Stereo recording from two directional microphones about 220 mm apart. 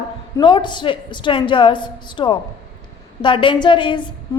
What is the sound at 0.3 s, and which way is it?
A woman's voice, 20° left (ahead or behind).